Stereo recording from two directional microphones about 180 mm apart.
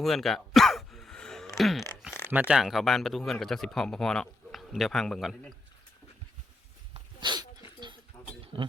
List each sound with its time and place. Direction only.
0.0 s a sound: centre (ahead or behind)
1.5 s speech: centre (ahead or behind)
6.9 s dog: 25° right (ahead or behind)